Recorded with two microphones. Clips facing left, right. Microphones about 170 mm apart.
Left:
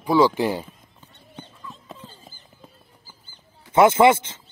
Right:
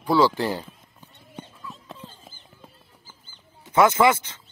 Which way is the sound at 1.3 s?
Centre (ahead or behind).